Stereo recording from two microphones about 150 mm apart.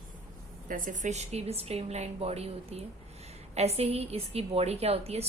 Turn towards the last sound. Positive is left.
turn(degrees=-40)  # may be behind; listen again after turning